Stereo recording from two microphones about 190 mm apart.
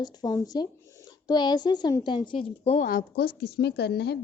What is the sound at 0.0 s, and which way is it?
A woman's voice, 20° left (ahead or behind).